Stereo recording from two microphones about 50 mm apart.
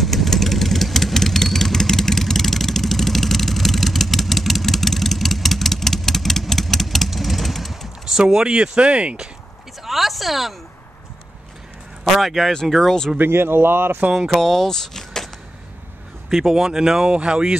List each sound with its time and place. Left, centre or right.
0.0 s vehicle: centre
8.0 s speech: centre
9.8 s speech: centre
12.0 s a man's voice: centre
13.2 s speech: right
14.2 s speech: centre
16.3 s speech: centre
17.1 s speech: right